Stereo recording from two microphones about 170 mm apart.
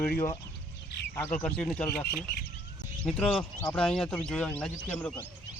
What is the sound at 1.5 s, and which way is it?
Speech, 5° left (ahead or behind).